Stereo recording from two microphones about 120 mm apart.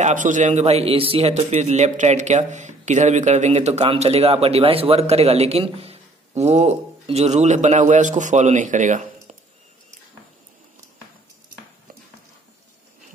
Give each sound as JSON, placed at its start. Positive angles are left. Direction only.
{"t": 0.0, "sound": "speech", "side_deg": -90}
{"t": 3.8, "sound": "a man's voice", "side_deg": -55}